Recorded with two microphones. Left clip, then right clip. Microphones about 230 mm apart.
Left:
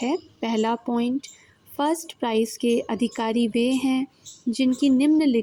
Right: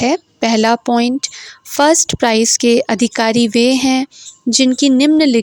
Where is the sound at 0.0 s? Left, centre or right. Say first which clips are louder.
Right 12 dB; right.